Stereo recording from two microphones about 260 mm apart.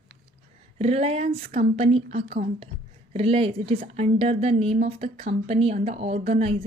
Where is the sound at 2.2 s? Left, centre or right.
Right.